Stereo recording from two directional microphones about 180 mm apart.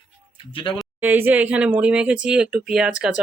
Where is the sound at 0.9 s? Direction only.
10° right (ahead or behind).